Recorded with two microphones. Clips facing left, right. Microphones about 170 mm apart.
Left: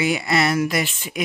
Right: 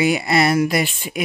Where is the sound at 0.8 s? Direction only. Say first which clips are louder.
Right 2 dB; 10° right (ahead or behind).